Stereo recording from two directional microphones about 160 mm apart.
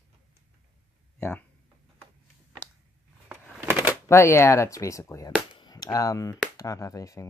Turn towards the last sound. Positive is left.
turn(degrees=20)  # may be behind; listen again after turning